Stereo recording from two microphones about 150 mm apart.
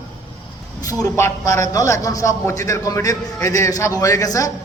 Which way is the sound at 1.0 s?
20° left (ahead or behind).